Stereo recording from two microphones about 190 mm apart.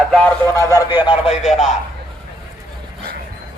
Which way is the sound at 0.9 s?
5° right (ahead or behind).